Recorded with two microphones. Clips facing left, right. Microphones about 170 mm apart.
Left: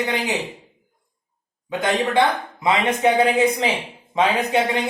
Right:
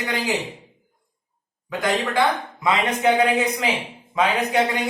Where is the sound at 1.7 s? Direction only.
20° left (ahead or behind).